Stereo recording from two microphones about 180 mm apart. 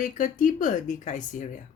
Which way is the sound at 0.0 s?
45° left (ahead or behind).